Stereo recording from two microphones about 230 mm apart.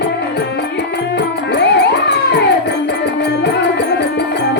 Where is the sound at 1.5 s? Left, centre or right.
Left.